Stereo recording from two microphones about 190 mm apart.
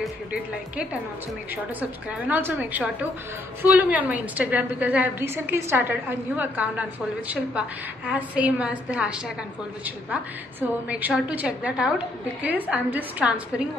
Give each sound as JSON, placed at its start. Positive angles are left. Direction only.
{"t": 0.0, "sound": "a woman's voice", "side_deg": -5}
{"t": 10.9, "sound": "a woman's voice", "side_deg": -10}